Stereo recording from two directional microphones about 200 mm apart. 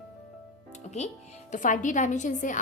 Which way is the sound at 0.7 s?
35° left (ahead or behind).